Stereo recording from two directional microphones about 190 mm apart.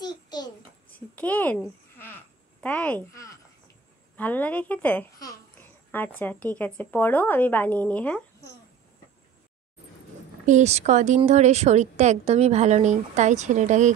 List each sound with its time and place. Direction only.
0.0 s a sound: 20° left (ahead or behind)
1.1 s a woman's voice: 10° left (ahead or behind)
2.6 s a child's voice: 5° left (ahead or behind)
10.4 s speech: 40° right (ahead or behind)